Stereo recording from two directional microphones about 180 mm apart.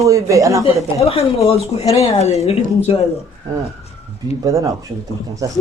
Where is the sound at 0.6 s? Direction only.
35° left (ahead or behind).